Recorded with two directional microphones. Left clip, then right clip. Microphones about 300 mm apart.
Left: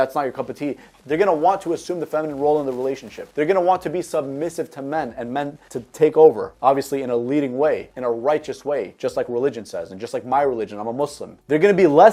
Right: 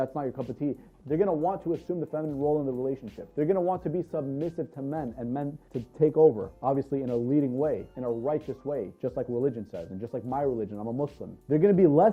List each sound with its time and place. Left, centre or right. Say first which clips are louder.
0.0 s speech: left 10 dB; centre
6.1 s speech: left 9 dB; centre
10.8 s speech: left 9 dB; centre
11.4 s speech: left 7 dB; centre